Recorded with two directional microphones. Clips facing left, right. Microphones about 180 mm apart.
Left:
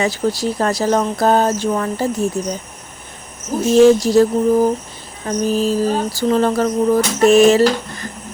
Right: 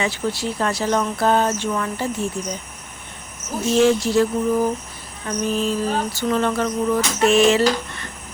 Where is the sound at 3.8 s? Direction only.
40° left (ahead or behind).